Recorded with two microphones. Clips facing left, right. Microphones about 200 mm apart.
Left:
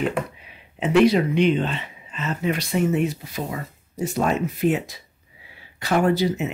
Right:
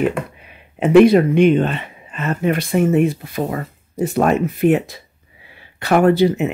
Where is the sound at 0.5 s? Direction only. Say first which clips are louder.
Right 11 dB; 55° right (ahead or behind).